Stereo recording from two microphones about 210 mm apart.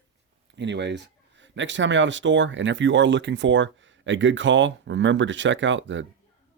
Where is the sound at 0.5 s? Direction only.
55° right (ahead or behind).